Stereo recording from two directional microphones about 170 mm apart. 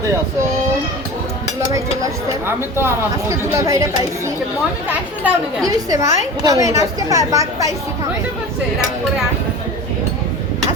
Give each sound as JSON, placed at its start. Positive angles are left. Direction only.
{"t": 2.5, "sound": "speech", "side_deg": -15}
{"t": 4.9, "sound": "speech", "side_deg": -10}
{"t": 5.6, "sound": "a woman's voice", "side_deg": -20}